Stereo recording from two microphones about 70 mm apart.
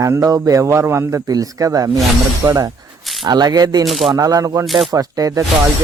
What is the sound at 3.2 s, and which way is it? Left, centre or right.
Speech, right.